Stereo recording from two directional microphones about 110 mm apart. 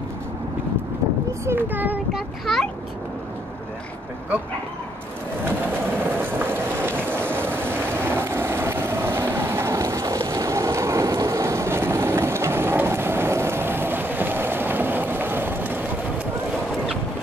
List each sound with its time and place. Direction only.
1.4 s a child's voice: 20° right (ahead or behind)
2.1 s a child's voice: centre (ahead or behind)
6.2 s vehicle: 20° right (ahead or behind)